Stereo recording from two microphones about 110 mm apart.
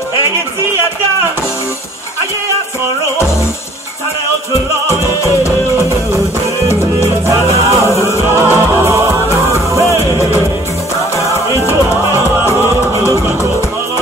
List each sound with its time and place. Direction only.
7.2 s music: 25° right (ahead or behind)
7.8 s music: 25° left (ahead or behind)
8.8 s music: 25° right (ahead or behind)